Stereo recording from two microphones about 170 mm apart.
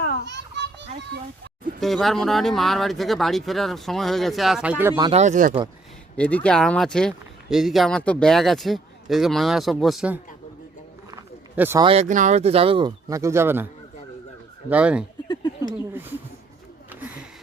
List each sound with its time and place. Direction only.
0.3 s children playing: 90° right
1.8 s speech: centre (ahead or behind)
5.1 s speech: 45° right (ahead or behind)
6.1 s speech: 10° left (ahead or behind)
11.1 s a sound: 15° right (ahead or behind)
11.8 s speech: 35° right (ahead or behind)
12.0 s speech: 45° right (ahead or behind); by 13.7 s 15° right (ahead or behind)
14.7 s speech: 5° right (ahead or behind)